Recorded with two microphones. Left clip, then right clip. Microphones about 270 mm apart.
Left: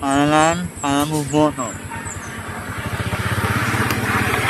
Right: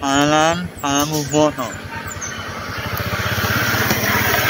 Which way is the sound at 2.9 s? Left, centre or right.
Centre.